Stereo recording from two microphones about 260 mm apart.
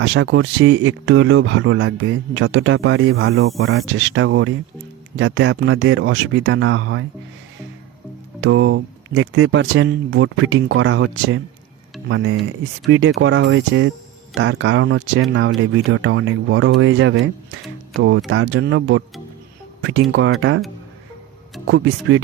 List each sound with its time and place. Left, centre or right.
0.0 s speech: right
8.4 s speech: right
21.7 s speech: right